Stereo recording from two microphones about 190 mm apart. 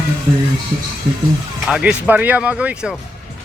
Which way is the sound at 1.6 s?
5° right (ahead or behind).